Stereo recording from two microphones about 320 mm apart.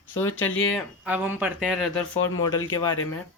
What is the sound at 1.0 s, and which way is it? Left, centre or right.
Speech, centre.